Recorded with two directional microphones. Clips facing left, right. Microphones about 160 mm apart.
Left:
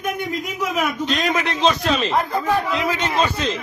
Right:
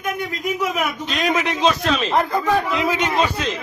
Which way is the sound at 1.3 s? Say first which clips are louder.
Right 1 dB; 15° right (ahead or behind).